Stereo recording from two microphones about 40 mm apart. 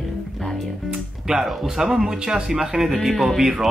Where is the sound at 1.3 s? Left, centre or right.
Centre.